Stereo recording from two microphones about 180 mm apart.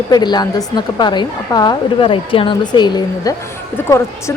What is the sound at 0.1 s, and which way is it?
A woman's voice, 25° left (ahead or behind).